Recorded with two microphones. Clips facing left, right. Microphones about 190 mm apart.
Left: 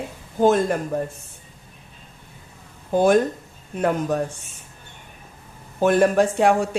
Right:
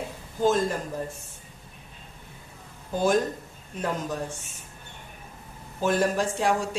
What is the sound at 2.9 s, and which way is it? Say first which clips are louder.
Speech: left 7 dB; 60° left (ahead or behind).